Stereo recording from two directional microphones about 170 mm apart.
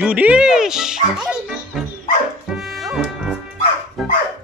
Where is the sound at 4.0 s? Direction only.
Centre (ahead or behind).